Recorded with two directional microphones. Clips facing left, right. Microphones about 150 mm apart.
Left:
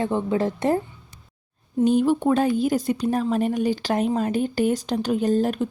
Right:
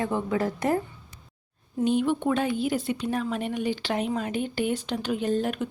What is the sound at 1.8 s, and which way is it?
A woman's voice, 40° left (ahead or behind).